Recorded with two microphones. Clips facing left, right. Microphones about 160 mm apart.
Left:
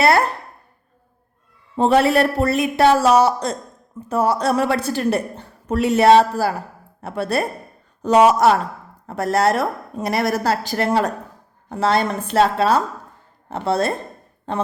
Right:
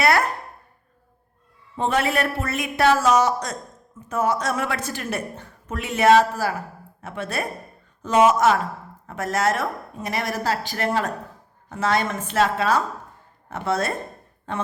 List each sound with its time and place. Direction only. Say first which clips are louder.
0.0 s speech: left 4 dB; 30° left (ahead or behind)
1.7 s a woman's voice: left 7 dB; 35° left (ahead or behind)